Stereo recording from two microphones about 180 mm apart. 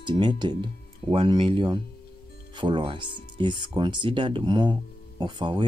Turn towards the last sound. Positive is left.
turn(degrees=-25)  # may be behind; listen again after turning